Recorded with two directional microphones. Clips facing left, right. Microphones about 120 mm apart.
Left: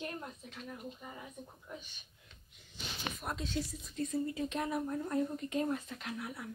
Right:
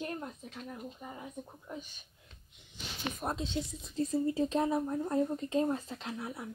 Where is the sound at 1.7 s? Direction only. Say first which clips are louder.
Right 5 dB; 35° right (ahead or behind).